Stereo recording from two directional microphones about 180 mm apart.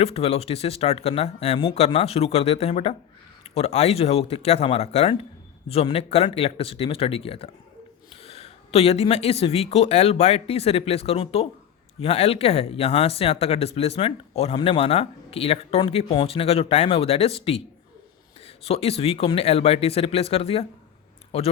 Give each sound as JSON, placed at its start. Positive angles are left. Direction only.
{"t": 0.0, "sound": "speech", "side_deg": 35}